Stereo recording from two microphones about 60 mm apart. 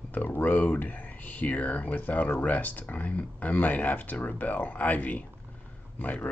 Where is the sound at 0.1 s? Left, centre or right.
Left.